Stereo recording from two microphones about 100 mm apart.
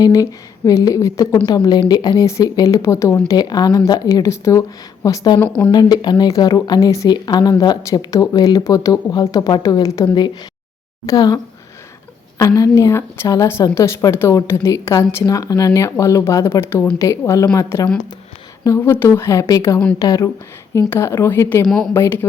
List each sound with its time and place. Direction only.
0.0 s speech: 35° left (ahead or behind)
3.2 s speech: 40° left (ahead or behind)
5.0 s speech: 40° left (ahead or behind)
5.4 s speech: 15° left (ahead or behind)
5.7 s speech: 45° left (ahead or behind)
12.4 s a woman's voice: 35° left (ahead or behind)